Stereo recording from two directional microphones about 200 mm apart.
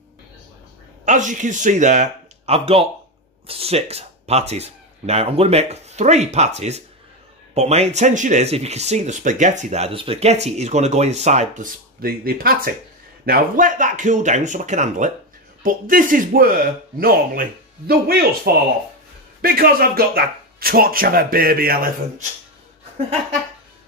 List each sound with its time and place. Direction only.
1.0 s speech: 40° right (ahead or behind)